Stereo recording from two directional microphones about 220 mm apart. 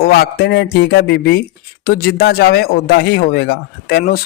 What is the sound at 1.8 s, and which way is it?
A man's voice, 40° left (ahead or behind).